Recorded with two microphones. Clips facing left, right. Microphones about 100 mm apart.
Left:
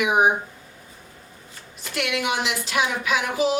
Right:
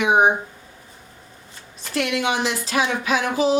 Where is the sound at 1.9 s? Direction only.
35° right (ahead or behind).